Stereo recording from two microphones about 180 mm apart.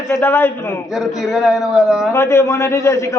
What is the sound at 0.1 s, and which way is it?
Speech, 10° left (ahead or behind).